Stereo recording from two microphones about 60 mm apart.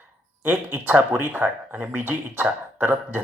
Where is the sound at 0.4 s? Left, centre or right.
Right.